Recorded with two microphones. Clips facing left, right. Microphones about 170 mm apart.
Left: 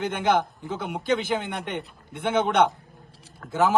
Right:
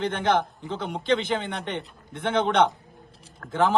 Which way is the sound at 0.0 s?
10° left (ahead or behind).